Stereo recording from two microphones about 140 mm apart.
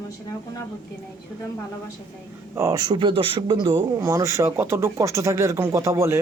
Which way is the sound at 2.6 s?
25° right (ahead or behind).